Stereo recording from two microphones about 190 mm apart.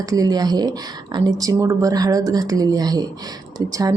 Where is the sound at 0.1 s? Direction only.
20° right (ahead or behind).